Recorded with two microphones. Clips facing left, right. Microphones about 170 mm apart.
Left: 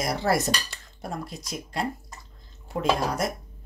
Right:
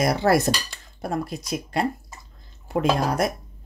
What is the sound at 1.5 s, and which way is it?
Speech, 65° right (ahead or behind).